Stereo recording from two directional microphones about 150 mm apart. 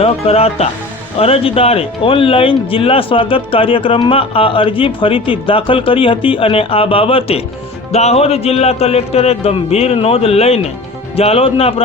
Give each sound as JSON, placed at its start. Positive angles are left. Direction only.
{"t": 0.0, "sound": "a man's voice", "side_deg": 40}